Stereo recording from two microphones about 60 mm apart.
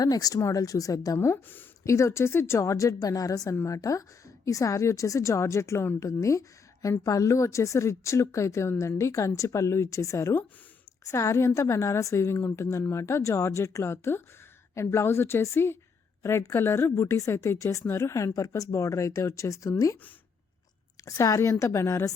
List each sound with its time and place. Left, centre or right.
0.0 s speech: left
0.3 s speech: left
1.8 s speech: left
3.7 s speech: left
7.0 s speech: left
16.9 s speech: left
21.0 s speech: left